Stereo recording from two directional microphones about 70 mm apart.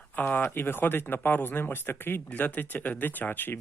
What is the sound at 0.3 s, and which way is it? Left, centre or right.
Speech, left.